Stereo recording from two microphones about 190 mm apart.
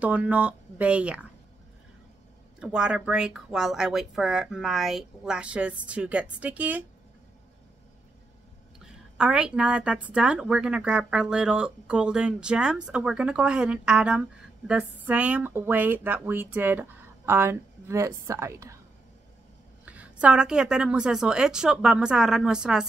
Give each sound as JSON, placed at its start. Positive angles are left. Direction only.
{"t": 0.0, "sound": "speech", "side_deg": -5}
{"t": 2.6, "sound": "a woman's voice", "side_deg": -5}
{"t": 8.7, "sound": "a woman's voice", "side_deg": -5}
{"t": 19.8, "sound": "a woman's voice", "side_deg": -5}